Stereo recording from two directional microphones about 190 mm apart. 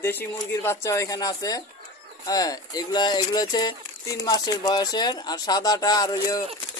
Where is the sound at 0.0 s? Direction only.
10° left (ahead or behind).